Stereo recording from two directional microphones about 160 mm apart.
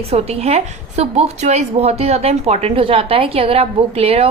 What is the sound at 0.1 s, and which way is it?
A woman's voice, 40° right (ahead or behind).